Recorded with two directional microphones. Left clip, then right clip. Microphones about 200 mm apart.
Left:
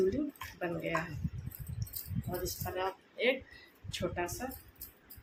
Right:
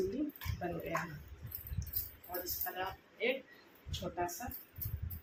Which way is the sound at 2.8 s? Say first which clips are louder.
Left 5 dB; 45° left (ahead or behind).